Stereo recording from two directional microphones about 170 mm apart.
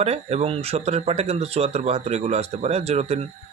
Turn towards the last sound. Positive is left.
turn(degrees=-40)  # may be behind; listen again after turning